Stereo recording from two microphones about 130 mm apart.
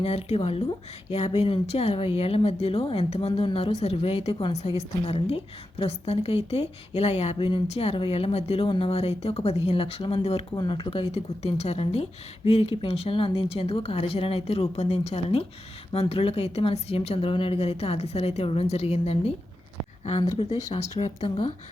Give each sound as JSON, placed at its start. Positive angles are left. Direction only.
{"t": 0.0, "sound": "speech", "side_deg": 50}
{"t": 10.5, "sound": "speech", "side_deg": 35}